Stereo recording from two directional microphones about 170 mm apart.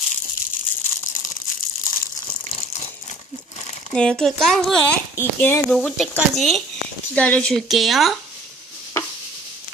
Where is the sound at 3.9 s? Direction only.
5° left (ahead or behind).